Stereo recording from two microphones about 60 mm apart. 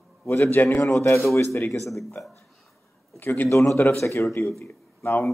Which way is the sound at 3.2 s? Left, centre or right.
Left.